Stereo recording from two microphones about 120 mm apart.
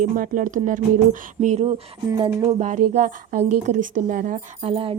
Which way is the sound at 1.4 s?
70° right (ahead or behind).